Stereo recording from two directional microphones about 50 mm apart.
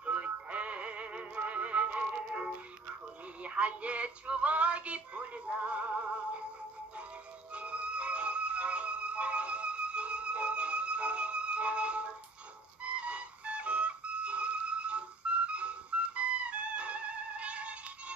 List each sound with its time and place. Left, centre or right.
0.0 s music: right
3.4 s synthetic singing: right
7.5 s music: right